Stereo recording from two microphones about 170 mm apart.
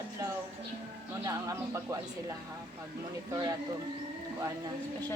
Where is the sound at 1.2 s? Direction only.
20° right (ahead or behind).